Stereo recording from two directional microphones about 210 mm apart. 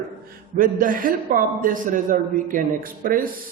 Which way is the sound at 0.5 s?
40° right (ahead or behind).